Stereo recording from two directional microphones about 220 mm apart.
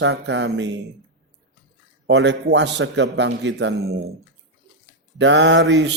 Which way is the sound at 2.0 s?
55° right (ahead or behind).